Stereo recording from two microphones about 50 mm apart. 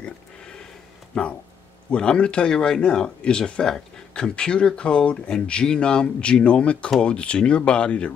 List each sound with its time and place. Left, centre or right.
1.1 s speech: centre